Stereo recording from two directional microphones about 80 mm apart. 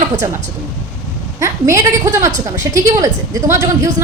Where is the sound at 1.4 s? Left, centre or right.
Right.